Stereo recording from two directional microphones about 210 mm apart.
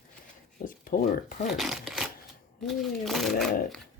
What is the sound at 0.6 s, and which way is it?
Speech, 40° left (ahead or behind).